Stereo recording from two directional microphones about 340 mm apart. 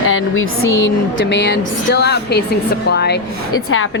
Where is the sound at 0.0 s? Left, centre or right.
Left.